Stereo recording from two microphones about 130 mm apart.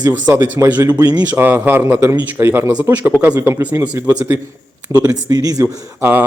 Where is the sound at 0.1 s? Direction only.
15° right (ahead or behind).